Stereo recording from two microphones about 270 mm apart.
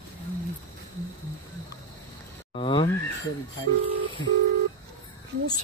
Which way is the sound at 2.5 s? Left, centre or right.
Centre.